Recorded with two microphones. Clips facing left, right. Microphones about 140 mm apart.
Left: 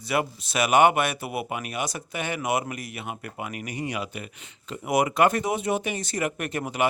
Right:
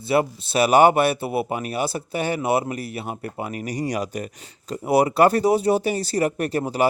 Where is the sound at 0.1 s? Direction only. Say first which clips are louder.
Right 6 dB; 30° right (ahead or behind).